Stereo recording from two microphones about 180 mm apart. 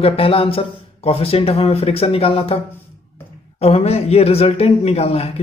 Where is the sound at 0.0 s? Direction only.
30° left (ahead or behind).